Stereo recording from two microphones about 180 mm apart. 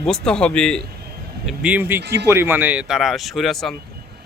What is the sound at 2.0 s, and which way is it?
Speech, 70° right (ahead or behind).